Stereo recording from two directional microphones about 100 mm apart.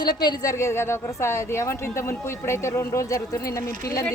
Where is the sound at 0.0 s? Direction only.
45° left (ahead or behind).